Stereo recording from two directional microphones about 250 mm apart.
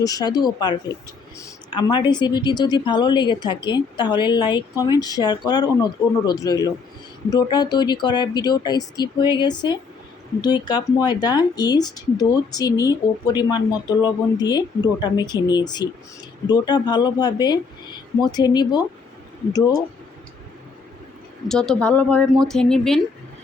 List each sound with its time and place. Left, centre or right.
0.0 s speech: centre
21.4 s speech: centre